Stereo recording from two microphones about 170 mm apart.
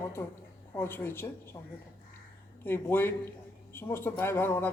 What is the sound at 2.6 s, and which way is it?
A man's voice, 15° left (ahead or behind).